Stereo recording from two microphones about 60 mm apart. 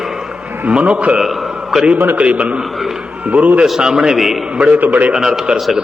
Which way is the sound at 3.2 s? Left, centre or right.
Right.